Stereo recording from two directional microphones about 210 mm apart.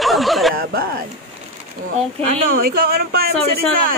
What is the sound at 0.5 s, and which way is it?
Speech, 45° right (ahead or behind).